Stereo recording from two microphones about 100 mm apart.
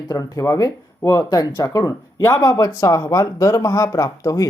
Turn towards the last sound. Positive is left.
turn(degrees=35)  # may be behind; listen again after turning